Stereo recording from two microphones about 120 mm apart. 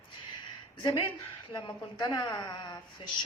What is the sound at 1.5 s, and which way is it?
A woman's voice, 40° left (ahead or behind).